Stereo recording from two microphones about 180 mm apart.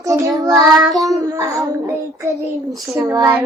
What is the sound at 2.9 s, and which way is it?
Speech, 15° right (ahead or behind).